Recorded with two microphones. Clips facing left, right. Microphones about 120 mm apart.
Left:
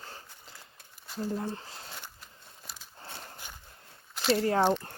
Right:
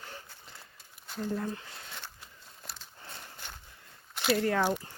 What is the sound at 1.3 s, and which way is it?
Speech, 30° left (ahead or behind).